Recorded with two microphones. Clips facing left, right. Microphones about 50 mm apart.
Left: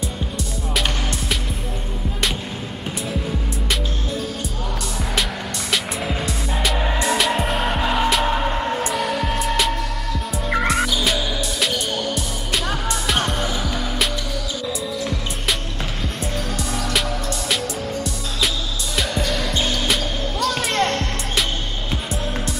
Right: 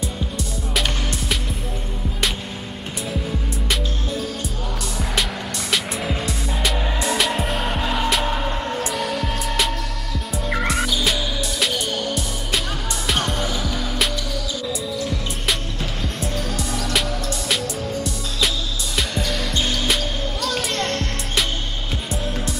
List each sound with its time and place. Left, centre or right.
5.7 s music: centre
7.7 s music: centre
8.8 s music: centre
9.1 s music: centre
9.4 s music: centre
16.3 s music: centre
19.9 s music: centre
20.7 s music: centre
22.1 s music: centre